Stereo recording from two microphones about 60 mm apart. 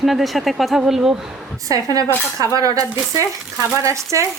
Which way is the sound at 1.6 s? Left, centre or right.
Right.